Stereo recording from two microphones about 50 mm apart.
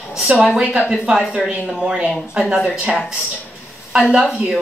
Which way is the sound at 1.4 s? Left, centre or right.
Centre.